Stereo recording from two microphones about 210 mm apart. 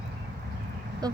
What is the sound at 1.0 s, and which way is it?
Speech, 20° right (ahead or behind).